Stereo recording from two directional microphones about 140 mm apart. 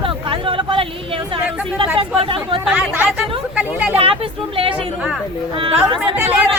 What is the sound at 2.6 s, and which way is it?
Speech, 10° right (ahead or behind).